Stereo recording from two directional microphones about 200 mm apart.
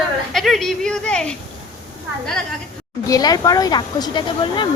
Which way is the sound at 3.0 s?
20° left (ahead or behind).